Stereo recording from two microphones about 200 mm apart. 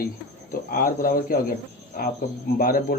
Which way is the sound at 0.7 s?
45° left (ahead or behind).